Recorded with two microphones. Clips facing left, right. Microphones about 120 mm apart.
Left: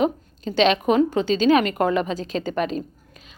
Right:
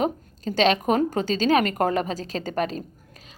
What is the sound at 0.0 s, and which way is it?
A woman's voice, 40° right (ahead or behind).